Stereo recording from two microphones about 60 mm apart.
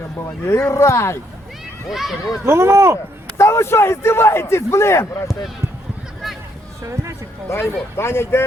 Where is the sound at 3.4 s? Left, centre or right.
Left.